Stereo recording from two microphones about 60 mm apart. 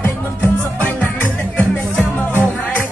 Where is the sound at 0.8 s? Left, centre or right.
Left.